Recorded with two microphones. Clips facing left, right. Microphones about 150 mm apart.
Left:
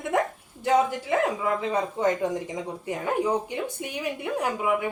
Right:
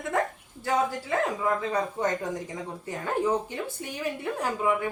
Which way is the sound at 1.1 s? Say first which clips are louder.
Left 2 dB; 15° left (ahead or behind).